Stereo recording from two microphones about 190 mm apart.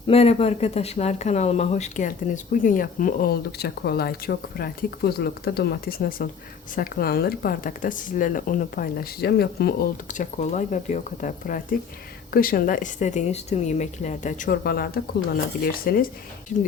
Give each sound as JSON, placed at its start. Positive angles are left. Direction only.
{"t": 0.1, "sound": "speech", "side_deg": 30}
{"t": 10.1, "sound": "speech", "side_deg": 40}